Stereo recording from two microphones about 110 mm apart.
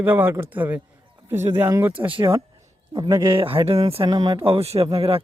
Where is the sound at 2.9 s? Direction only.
40° right (ahead or behind); by 4.1 s 60° right (ahead or behind).